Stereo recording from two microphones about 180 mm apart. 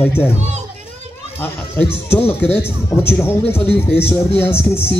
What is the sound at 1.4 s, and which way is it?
Speech, 10° left (ahead or behind).